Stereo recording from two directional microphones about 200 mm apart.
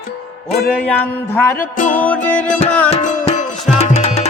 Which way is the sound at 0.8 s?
5° left (ahead or behind).